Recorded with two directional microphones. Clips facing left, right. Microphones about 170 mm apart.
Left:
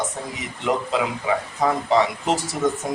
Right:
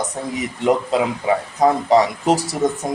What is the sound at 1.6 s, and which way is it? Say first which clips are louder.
Speech: right 5 dB; 40° right (ahead or behind).